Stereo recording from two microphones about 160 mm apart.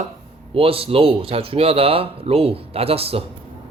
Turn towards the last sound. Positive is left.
turn(degrees=-35)  # may be behind; listen again after turning